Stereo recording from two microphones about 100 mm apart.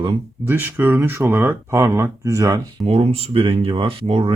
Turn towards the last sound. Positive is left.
turn(degrees=-60)  # may be behind; listen again after turning